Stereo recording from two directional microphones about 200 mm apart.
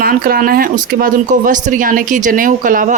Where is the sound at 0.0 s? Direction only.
50° right (ahead or behind).